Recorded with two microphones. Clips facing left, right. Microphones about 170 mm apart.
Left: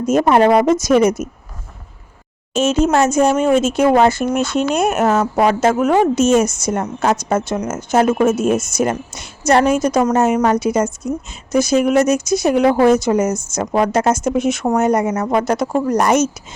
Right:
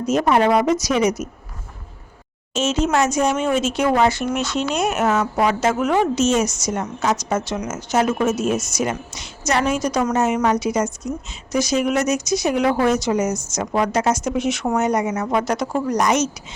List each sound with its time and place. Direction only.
0.0 s speech: 50° left (ahead or behind)
2.6 s speech: 50° left (ahead or behind)